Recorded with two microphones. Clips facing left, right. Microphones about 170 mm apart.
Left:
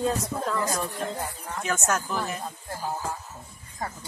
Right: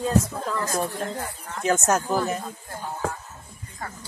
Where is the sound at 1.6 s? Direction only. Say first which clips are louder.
Right 6 dB; 40° right (ahead or behind).